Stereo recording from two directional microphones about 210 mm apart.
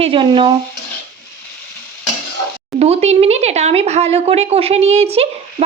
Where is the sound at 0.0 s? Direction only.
25° right (ahead or behind).